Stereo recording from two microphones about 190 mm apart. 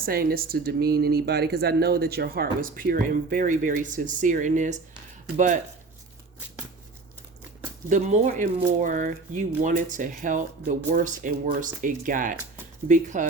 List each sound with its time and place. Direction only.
0.0 s speech: 50° right (ahead or behind)
7.9 s speech: 40° right (ahead or behind)